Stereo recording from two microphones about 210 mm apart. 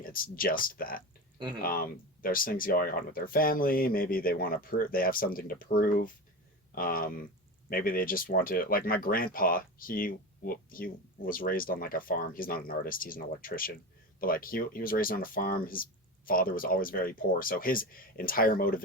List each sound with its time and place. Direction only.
0.0 s speech: 45° left (ahead or behind)